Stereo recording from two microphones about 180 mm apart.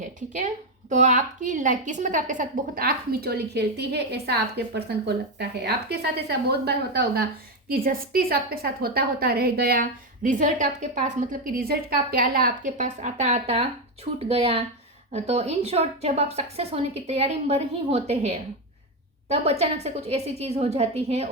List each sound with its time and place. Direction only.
0.3 s a woman's voice: 45° right (ahead or behind)